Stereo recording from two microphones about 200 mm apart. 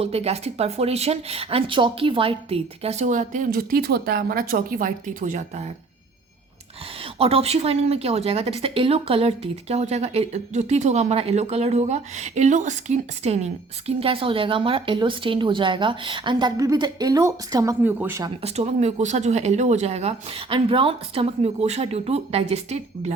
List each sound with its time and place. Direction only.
0.0 s speech: 30° right (ahead or behind)
7.0 s speech: 30° right (ahead or behind); by 18.3 s 10° right (ahead or behind)
18.4 s speech: 30° right (ahead or behind)